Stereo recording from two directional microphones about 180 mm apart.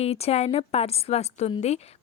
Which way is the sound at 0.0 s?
35° left (ahead or behind).